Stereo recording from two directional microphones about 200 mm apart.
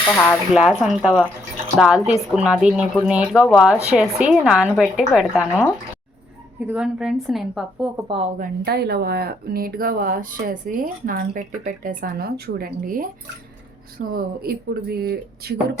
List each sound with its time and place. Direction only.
0.1 s speech: 10° left (ahead or behind)
0.5 s a woman's voice: 5° right (ahead or behind)
6.7 s a woman's voice: 5° right (ahead or behind)
7.9 s speech: 25° right (ahead or behind)
8.4 s speech: 55° right (ahead or behind)